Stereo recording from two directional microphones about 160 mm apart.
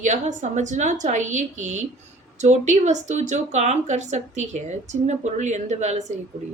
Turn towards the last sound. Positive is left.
turn(degrees=-45)  # may be behind; listen again after turning